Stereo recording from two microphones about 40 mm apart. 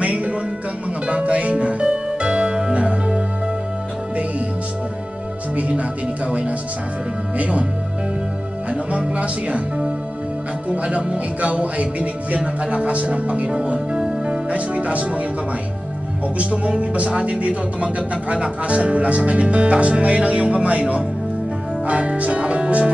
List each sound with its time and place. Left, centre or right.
0.0 s music: right
5.6 s music: right
7.3 s speech: right
8.6 s music: right
10.8 s speech: right
16.3 s speech: right